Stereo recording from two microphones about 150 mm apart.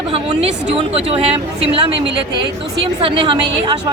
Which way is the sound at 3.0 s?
35° right (ahead or behind).